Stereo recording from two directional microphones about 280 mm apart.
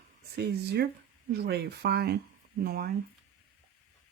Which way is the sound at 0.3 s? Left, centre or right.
Right.